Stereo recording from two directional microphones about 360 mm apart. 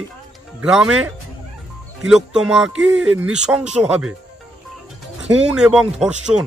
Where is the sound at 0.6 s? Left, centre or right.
Centre.